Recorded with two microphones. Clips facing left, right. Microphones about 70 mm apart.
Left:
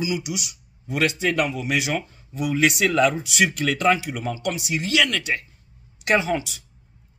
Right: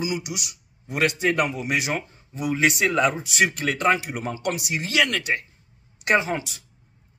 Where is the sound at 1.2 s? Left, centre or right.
Right.